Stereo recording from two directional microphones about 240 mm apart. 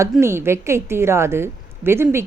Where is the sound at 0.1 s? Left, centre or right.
Centre.